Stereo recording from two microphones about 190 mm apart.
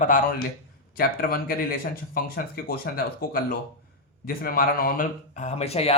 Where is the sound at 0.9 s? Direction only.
50° left (ahead or behind).